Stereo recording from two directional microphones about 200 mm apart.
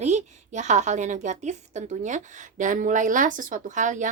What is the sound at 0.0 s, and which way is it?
A woman's voice, 35° right (ahead or behind).